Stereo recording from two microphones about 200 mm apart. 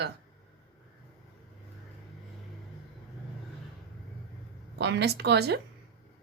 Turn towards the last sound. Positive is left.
turn(degrees=-55)  # may be behind; listen again after turning